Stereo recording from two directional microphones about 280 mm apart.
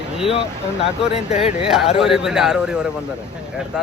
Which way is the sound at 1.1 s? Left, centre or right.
Left.